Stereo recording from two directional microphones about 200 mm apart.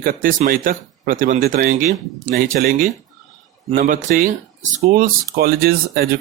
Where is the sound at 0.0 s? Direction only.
45° right (ahead or behind).